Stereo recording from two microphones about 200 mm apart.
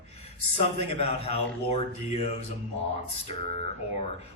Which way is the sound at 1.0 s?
30° left (ahead or behind).